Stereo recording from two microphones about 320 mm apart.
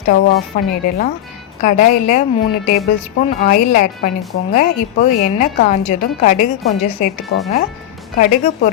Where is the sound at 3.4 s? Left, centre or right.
Left.